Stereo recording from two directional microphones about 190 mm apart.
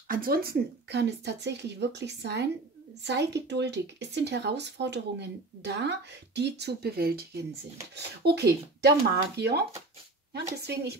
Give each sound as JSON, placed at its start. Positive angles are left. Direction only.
{"t": 0.1, "sound": "speech", "side_deg": -50}